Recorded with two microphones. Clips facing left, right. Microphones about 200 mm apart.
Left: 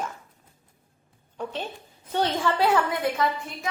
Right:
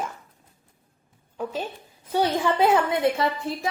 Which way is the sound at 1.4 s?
10° right (ahead or behind).